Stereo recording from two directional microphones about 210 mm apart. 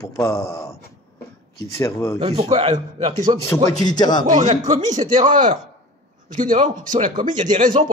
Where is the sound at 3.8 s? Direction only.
20° left (ahead or behind).